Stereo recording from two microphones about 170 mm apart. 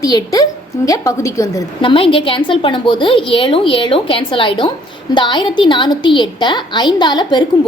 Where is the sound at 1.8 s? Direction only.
30° left (ahead or behind).